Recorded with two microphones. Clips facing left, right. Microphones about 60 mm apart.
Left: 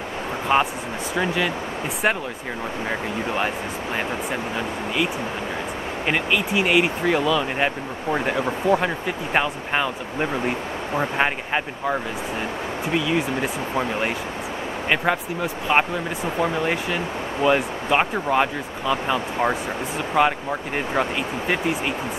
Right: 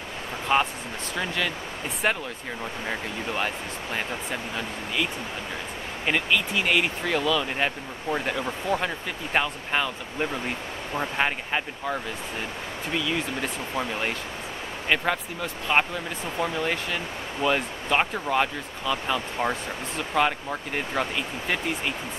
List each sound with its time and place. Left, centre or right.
0.5 s speech: centre